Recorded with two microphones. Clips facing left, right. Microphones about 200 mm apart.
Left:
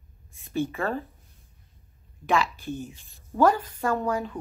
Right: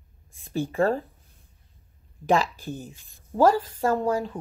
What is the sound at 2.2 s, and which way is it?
A woman's voice, 35° right (ahead or behind).